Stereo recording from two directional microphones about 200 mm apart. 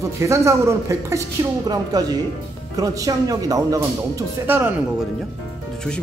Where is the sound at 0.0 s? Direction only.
15° right (ahead or behind).